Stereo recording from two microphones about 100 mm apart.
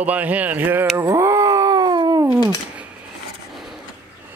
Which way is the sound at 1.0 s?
30° right (ahead or behind).